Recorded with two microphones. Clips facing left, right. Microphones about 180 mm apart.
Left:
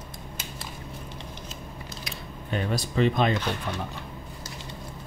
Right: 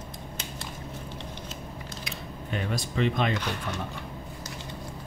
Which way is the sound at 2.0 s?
35° left (ahead or behind).